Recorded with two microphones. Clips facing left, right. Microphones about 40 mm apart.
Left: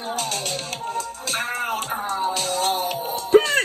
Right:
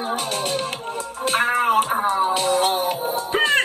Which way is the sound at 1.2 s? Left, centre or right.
Right.